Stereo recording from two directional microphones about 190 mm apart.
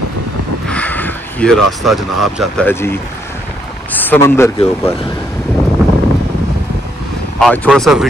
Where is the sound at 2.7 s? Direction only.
10° left (ahead or behind).